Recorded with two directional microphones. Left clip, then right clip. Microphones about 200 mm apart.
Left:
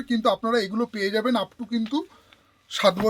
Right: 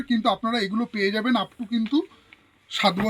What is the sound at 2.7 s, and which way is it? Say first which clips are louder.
Speech: left 2 dB; 30° left (ahead or behind).